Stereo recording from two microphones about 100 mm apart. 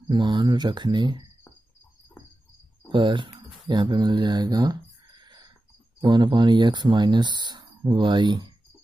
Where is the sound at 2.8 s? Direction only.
50° right (ahead or behind).